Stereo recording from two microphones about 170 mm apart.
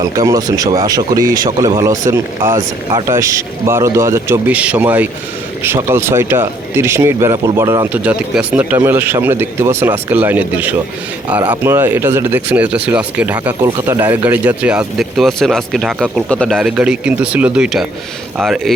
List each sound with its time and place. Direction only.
0.2 s speech: 20° right (ahead or behind); by 16.6 s 5° left (ahead or behind)
16.6 s speech: 5° right (ahead or behind)